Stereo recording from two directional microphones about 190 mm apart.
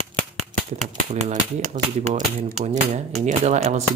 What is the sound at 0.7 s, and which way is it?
Speech, 35° right (ahead or behind).